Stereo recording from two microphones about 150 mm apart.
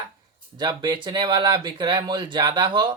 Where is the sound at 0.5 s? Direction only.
30° right (ahead or behind).